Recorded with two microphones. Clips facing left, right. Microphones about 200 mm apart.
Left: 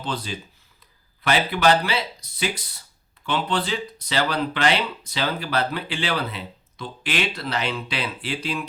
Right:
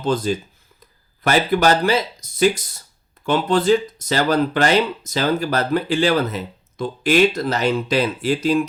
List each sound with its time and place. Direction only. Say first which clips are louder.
0.0 s speech: right 10 dB; 45° right (ahead or behind)